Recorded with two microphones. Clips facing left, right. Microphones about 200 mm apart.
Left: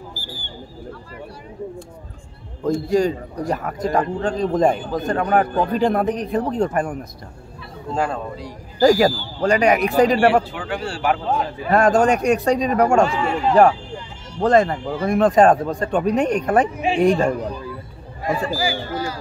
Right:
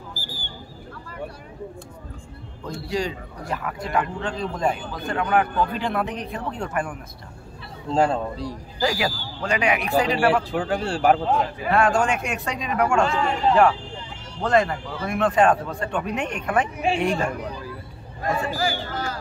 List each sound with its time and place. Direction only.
2.9 s a man's voice: 45° left (ahead or behind)
7.9 s speech: 25° right (ahead or behind)
8.7 s a man's voice: 45° left (ahead or behind)
10.5 s a man's voice: 40° right (ahead or behind)
11.7 s speech: 40° left (ahead or behind)
13.0 s a man's voice: 5° left (ahead or behind)
14.4 s speech: 35° left (ahead or behind)
18.2 s speech: 10° left (ahead or behind)